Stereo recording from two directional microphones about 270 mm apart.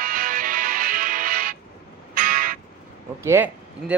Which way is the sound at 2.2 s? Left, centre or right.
Right.